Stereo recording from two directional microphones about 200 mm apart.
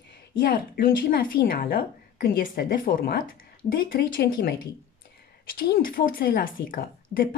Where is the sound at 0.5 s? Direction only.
45° left (ahead or behind).